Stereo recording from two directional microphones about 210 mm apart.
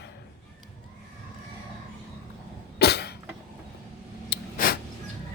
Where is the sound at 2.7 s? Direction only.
50° left (ahead or behind).